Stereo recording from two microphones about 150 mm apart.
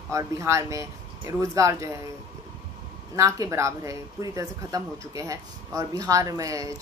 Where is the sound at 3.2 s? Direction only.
20° right (ahead or behind).